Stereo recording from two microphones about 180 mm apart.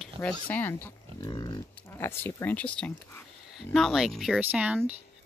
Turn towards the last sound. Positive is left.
turn(degrees=-5)  # may be behind; listen again after turning